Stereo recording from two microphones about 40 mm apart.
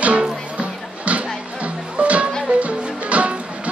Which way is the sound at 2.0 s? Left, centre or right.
Right.